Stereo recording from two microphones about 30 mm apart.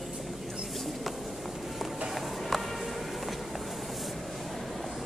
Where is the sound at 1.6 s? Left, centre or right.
Centre.